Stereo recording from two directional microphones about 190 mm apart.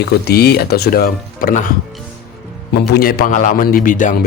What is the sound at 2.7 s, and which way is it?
Speech, 60° left (ahead or behind).